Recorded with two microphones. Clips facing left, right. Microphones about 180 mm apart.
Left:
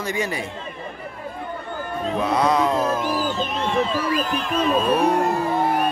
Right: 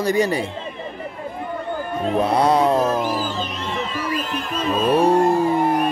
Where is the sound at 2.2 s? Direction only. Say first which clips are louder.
Right 2 dB; 30° right (ahead or behind).